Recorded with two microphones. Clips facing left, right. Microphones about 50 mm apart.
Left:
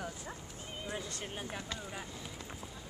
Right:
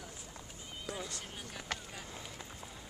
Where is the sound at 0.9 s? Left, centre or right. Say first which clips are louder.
Left 1 dB; left.